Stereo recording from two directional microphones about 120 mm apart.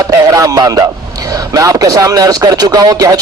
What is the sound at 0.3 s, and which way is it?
A man's voice, 30° right (ahead or behind).